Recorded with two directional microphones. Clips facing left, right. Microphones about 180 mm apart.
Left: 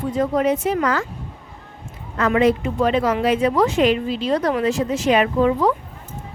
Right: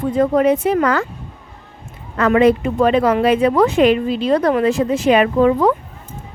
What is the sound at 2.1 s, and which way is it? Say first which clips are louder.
A woman's voice: right 4 dB; 60° right (ahead or behind).